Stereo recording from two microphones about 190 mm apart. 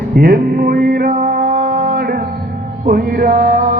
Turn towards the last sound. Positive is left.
turn(degrees=-50)  # may be behind; listen again after turning